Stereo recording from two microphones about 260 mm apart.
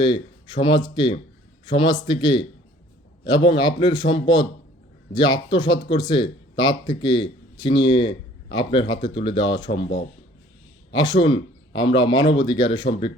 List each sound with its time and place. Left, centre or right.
0.0 s speech: centre
10.9 s speech: centre